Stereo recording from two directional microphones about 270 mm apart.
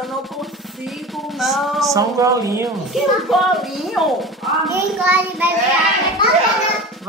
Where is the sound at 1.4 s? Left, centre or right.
Centre.